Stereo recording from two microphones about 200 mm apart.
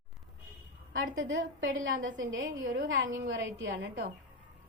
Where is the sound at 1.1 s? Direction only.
70° right (ahead or behind).